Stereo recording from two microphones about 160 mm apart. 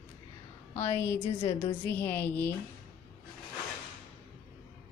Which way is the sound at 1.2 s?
40° left (ahead or behind).